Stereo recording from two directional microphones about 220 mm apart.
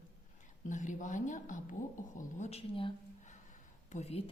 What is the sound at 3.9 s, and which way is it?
Speech, 30° left (ahead or behind).